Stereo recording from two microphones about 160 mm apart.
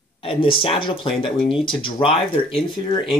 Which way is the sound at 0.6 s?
35° left (ahead or behind).